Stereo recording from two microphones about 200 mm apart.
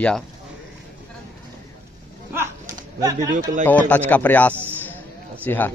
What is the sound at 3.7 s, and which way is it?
Speech, 10° left (ahead or behind).